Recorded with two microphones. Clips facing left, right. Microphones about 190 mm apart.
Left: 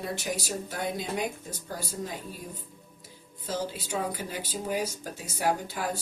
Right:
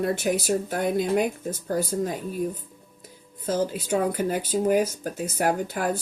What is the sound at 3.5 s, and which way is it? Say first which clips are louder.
Speech: right 8 dB; 55° right (ahead or behind).